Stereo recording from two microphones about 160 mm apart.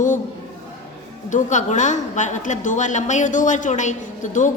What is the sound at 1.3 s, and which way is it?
A woman's voice, 50° left (ahead or behind).